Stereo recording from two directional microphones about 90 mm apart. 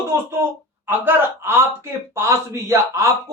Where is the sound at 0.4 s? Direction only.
25° right (ahead or behind).